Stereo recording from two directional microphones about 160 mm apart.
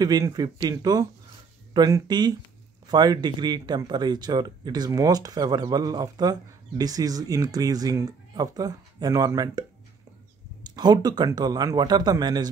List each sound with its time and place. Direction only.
0.0 s speech: 25° right (ahead or behind)
10.7 s speech: 25° right (ahead or behind)